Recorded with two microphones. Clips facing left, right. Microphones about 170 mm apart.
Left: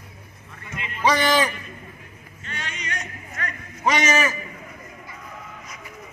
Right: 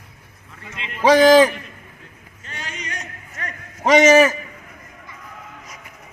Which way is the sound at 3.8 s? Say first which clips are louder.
Right 9 dB; 90° right.